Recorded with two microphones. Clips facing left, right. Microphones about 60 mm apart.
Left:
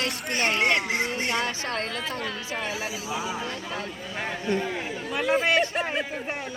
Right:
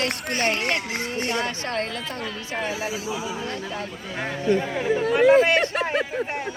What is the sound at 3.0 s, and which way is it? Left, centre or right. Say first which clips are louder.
Speech: right 1 dB; centre.